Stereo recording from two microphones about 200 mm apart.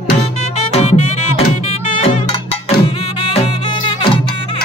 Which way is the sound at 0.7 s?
35° left (ahead or behind).